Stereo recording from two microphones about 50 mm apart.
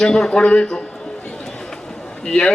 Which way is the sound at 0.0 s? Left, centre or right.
Centre.